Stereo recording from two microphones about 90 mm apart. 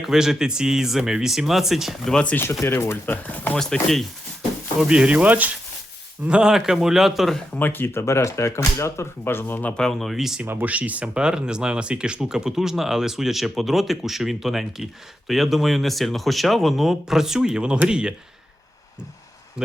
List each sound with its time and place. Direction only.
0.0 s speech: 5° right (ahead or behind)
2.3 s speech: 25° left (ahead or behind)
3.6 s speech: 5° left (ahead or behind)
4.9 s speech: 10° right (ahead or behind)
7.5 s speech: 20° left (ahead or behind)
9.7 s speech: 5° left (ahead or behind)
10.4 s speech: 20° right (ahead or behind)
19.6 s speech: 10° right (ahead or behind)